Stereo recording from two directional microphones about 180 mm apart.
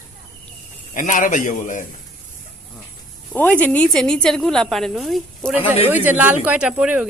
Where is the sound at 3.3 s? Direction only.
10° left (ahead or behind).